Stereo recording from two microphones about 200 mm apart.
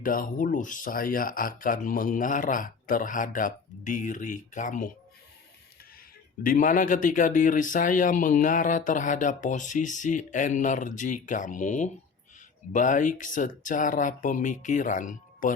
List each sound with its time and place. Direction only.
0.0 s speech: 45° left (ahead or behind)
6.4 s speech: 40° left (ahead or behind)